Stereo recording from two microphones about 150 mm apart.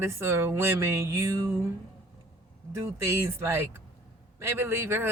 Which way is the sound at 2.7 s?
20° right (ahead or behind).